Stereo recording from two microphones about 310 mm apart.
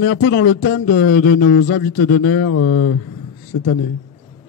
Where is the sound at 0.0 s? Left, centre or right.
Left.